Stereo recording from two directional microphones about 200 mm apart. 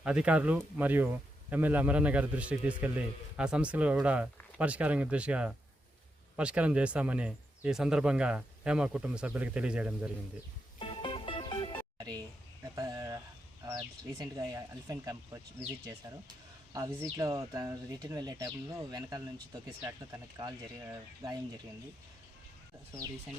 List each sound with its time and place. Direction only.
0.0 s a man's voice: 5° right (ahead or behind)
10.8 s music: 25° left (ahead or behind)
11.9 s a sound: 20° right (ahead or behind)
12.6 s speech: 15° right (ahead or behind)
16.7 s speech: 15° right (ahead or behind)